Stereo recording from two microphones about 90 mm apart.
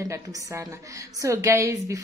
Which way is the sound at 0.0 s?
40° right (ahead or behind).